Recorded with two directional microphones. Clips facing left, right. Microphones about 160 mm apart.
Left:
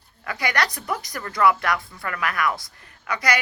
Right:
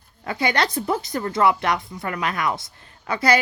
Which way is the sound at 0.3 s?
25° right (ahead or behind).